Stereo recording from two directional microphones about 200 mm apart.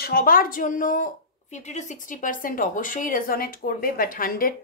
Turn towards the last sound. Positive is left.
turn(degrees=45)  # may be behind; listen again after turning